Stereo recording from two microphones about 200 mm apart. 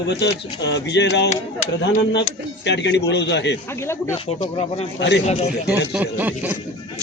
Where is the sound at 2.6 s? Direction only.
60° left (ahead or behind).